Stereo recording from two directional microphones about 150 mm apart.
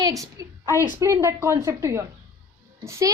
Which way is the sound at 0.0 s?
20° right (ahead or behind).